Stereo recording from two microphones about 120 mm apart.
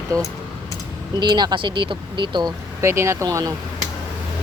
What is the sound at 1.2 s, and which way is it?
Speech, 35° right (ahead or behind).